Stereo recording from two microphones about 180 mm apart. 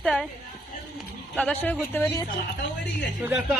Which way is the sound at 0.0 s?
Centre (ahead or behind).